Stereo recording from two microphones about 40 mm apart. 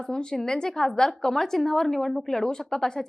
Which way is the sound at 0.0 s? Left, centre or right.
Centre.